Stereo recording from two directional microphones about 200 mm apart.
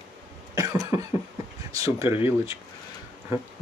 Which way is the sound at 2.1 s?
25° left (ahead or behind).